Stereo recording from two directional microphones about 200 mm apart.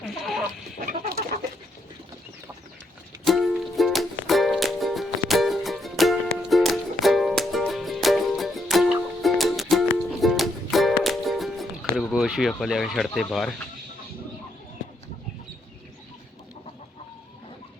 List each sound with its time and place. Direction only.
0.2 s chicken: centre (ahead or behind)
0.9 s chicken: 45° right (ahead or behind)
3.2 s music: centre (ahead or behind)
11.9 s speech: centre (ahead or behind)